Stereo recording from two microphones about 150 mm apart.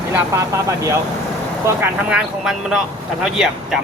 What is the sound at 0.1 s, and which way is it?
Speech, 20° right (ahead or behind).